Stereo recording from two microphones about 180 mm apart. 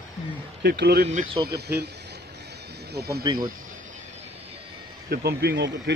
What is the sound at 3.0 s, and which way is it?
Speech, 60° right (ahead or behind).